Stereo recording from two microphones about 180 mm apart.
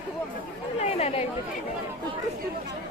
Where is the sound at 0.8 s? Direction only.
35° left (ahead or behind).